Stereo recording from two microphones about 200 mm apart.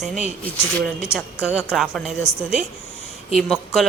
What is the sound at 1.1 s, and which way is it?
Speech, 5° right (ahead or behind).